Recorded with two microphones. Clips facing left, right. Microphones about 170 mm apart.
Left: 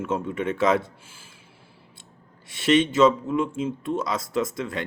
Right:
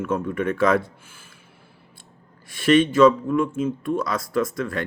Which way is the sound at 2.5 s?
25° left (ahead or behind).